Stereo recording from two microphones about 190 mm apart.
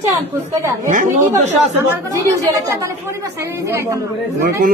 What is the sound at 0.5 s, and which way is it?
Speech, 15° right (ahead or behind).